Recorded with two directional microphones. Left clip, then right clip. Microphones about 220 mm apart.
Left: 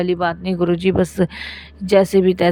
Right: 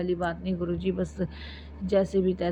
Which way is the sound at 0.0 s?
55° left (ahead or behind).